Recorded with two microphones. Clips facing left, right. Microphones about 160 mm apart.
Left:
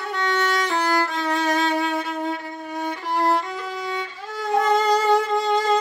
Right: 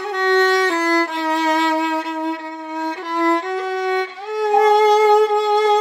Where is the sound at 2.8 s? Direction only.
75° right (ahead or behind).